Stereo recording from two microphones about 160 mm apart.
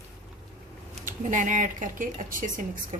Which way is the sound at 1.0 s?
50° right (ahead or behind).